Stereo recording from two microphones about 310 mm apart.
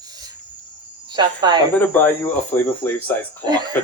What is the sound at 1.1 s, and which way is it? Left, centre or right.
Speech, centre.